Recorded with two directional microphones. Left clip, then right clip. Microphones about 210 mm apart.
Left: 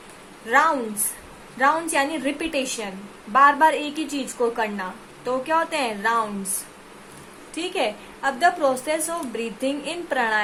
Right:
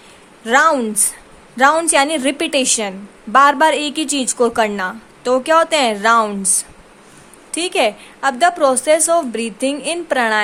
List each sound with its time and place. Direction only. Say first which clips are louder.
0.4 s a woman's voice: right 6 dB; 50° right (ahead or behind)
7.5 s a woman's voice: right 8 dB; 45° right (ahead or behind)